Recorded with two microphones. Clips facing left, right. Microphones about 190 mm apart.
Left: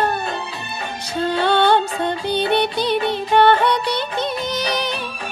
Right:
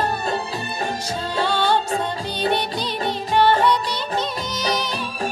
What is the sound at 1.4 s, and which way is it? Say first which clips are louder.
Music: left 4 dB; 60° left (ahead or behind).